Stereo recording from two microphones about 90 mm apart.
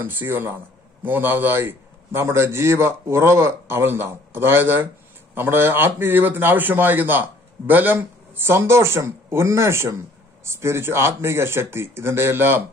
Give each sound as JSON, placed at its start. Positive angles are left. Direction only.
{"t": 0.0, "sound": "a man's voice", "side_deg": -25}